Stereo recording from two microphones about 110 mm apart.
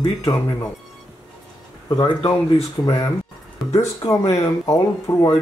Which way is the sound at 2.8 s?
40° left (ahead or behind).